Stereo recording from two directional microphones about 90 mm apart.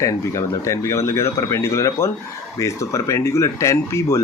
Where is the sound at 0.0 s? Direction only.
35° left (ahead or behind).